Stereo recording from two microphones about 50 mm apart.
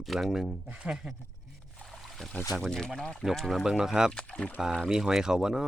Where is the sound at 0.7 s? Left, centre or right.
Centre.